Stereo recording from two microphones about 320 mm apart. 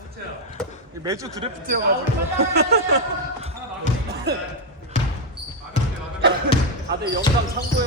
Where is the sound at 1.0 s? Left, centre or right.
Centre.